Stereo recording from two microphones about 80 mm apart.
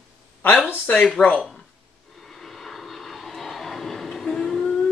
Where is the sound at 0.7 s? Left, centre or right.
Left.